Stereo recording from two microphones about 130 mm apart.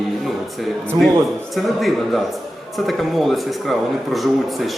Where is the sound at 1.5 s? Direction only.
Centre (ahead or behind).